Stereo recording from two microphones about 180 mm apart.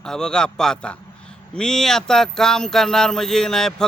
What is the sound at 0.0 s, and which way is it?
Speech, 5° left (ahead or behind).